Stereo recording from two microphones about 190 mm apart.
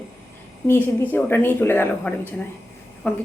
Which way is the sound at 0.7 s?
10° left (ahead or behind).